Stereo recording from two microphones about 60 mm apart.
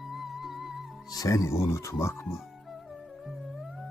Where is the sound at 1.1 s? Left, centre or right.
Left.